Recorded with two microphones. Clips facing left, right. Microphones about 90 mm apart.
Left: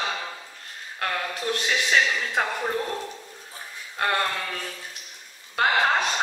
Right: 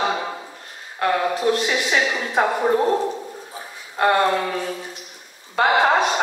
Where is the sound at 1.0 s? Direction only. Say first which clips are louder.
Right 9 dB; 30° right (ahead or behind).